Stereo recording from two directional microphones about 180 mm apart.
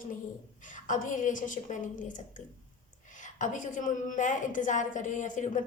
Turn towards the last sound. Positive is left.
turn(degrees=45)  # may be behind; listen again after turning